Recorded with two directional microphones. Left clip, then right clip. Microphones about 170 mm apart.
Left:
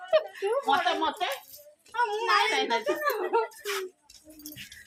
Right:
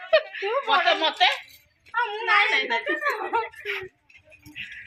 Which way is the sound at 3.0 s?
30° left (ahead or behind).